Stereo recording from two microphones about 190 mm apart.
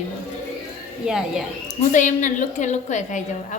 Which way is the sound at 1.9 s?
40° left (ahead or behind).